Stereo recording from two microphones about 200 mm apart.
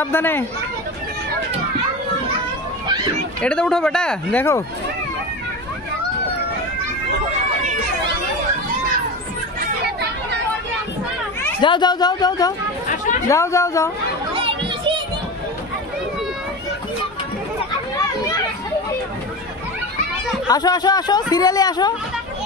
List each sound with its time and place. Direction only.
0.0 s a woman's voice: 10° left (ahead or behind)
3.4 s speech: 5° left (ahead or behind)
11.6 s speech: 20° left (ahead or behind)
12.8 s chatter: 40° left (ahead or behind)
13.3 s a woman's voice: 15° left (ahead or behind)
14.3 s children playing: 25° right (ahead or behind)
20.4 s speech: 20° left (ahead or behind)